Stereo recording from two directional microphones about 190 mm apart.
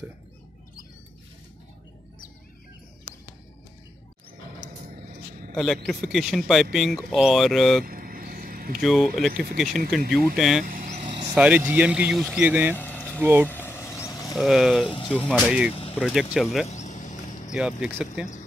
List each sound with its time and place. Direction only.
5.5 s speech: 5° left (ahead or behind)
7.8 s vehicle: 50° right (ahead or behind)
8.8 s speech: centre (ahead or behind)
10.6 s vehicle: 50° right (ahead or behind)
11.1 s vehicle: 25° right (ahead or behind)
11.3 s speech: 5° right (ahead or behind)
12.7 s a sound: 10° left (ahead or behind)
13.2 s speech: 10° right (ahead or behind)
13.5 s vehicle: 10° left (ahead or behind)
14.3 s speech: centre (ahead or behind)
16.6 s a sound: 40° left (ahead or behind)
17.6 s speech: 5° right (ahead or behind)